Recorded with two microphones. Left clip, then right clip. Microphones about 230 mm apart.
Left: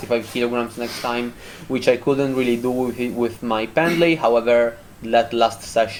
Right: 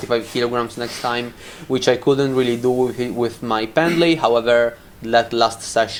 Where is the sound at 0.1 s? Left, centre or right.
Centre.